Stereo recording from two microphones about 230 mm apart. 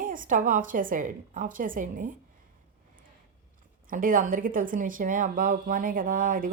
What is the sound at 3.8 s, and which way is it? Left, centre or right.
A woman's voice, right.